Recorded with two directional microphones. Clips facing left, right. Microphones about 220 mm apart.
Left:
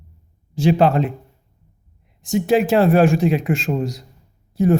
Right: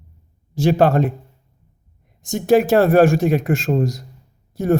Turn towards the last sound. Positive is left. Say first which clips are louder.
# left 1 dB
turn(degrees=-45)  # may be behind; listen again after turning